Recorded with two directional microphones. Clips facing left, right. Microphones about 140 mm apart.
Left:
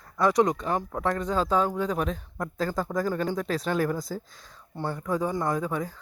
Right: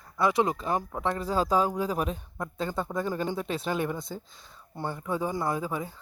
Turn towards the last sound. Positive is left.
turn(degrees=-10)  # may be behind; listen again after turning